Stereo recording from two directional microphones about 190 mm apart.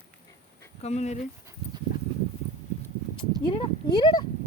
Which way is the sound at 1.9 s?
45° left (ahead or behind).